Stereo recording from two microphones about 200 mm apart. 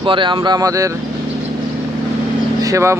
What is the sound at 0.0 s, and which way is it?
Speech, 25° right (ahead or behind).